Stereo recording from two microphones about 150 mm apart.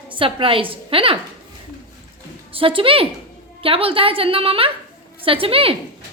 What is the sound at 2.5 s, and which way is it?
A woman's voice, 35° right (ahead or behind).